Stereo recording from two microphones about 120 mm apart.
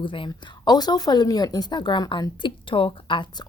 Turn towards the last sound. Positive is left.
turn(degrees=45)  # may be behind; listen again after turning